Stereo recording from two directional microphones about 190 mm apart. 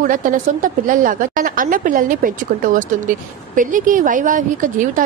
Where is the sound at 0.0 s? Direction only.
45° right (ahead or behind).